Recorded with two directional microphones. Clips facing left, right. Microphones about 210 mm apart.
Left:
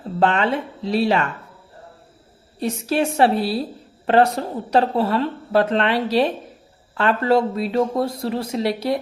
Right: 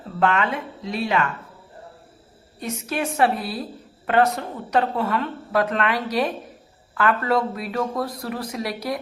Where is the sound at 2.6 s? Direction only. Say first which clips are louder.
Left 6 dB; 30° left (ahead or behind).